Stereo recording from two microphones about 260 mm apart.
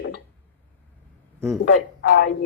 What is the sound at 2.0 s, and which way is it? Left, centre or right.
Speech, left.